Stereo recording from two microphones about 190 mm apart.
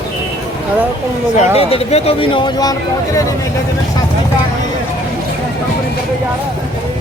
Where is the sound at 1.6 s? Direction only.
30° left (ahead or behind).